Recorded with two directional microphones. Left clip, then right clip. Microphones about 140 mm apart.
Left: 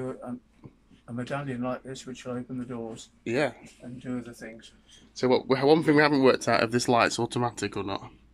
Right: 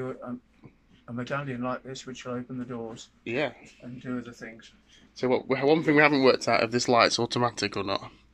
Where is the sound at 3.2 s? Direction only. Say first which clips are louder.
Left 2 dB; 30° left (ahead or behind).